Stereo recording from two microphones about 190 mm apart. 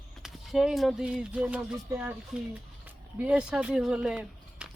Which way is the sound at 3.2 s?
5° right (ahead or behind).